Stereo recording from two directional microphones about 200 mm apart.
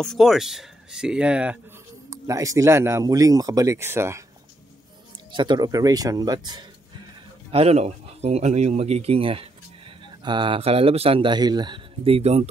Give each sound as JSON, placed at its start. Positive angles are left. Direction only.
{"t": 0.0, "sound": "speech", "side_deg": 0}
{"t": 5.3, "sound": "speech", "side_deg": -25}
{"t": 7.5, "sound": "speech", "side_deg": -30}